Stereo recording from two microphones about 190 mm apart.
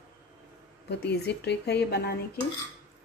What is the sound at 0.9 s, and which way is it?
A woman's voice, 60° left (ahead or behind).